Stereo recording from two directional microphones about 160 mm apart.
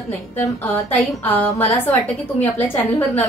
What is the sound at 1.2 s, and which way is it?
A woman's voice, 10° left (ahead or behind).